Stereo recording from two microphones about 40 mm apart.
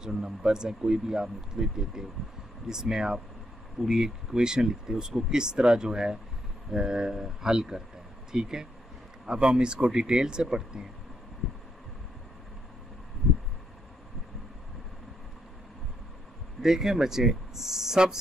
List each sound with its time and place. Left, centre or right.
0.0 s speech: centre
16.6 s speech: centre